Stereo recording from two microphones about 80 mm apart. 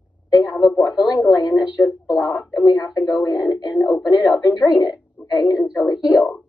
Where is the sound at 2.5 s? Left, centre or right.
Left.